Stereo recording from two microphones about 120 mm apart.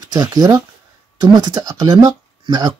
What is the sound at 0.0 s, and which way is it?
Speech, 35° right (ahead or behind).